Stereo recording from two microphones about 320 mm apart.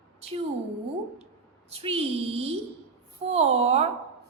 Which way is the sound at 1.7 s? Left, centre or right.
Centre.